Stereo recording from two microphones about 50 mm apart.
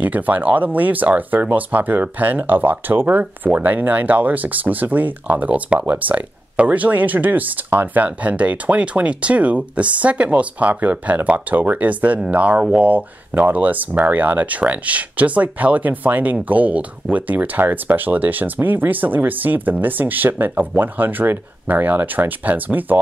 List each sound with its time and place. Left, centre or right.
0.0 s speech: right